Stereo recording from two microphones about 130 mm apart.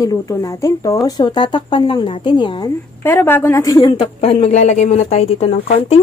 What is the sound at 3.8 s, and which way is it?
Speech, 40° left (ahead or behind).